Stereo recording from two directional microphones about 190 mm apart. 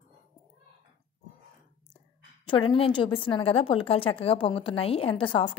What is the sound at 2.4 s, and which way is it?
A woman's voice, 25° left (ahead or behind).